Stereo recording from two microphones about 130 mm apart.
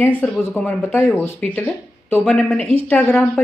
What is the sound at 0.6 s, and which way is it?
A man's voice, 15° left (ahead or behind).